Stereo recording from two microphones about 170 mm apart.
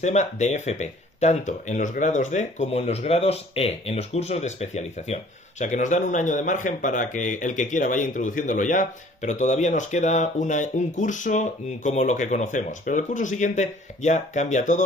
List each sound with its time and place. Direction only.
0.0 s speech: 40° left (ahead or behind)